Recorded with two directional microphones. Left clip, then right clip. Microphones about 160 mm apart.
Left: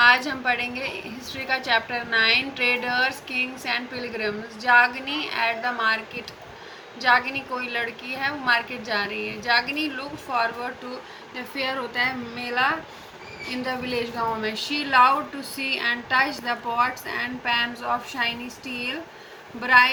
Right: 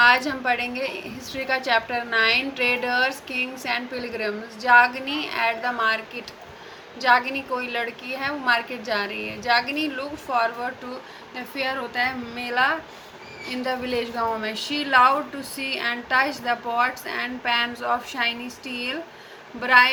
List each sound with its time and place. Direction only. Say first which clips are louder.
0.0 s a woman's voice: even; 55° right (ahead or behind)
7.0 s a woman's voice: right 1 dB; 60° right (ahead or behind)
11.5 s a woman's voice: even; 50° right (ahead or behind)